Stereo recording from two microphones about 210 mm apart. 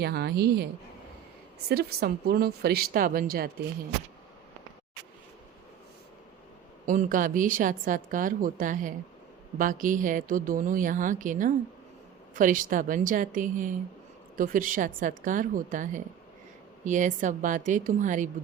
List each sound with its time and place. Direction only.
0.0 s speech: 50° right (ahead or behind)
1.7 s speech: 45° right (ahead or behind)
6.8 s a woman's voice: 40° right (ahead or behind)